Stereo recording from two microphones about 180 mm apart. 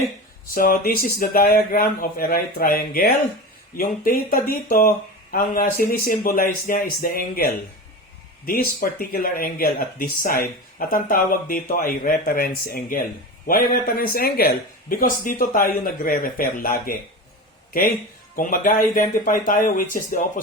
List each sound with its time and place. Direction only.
0.5 s speech: 50° left (ahead or behind)
18.3 s speech: 50° left (ahead or behind)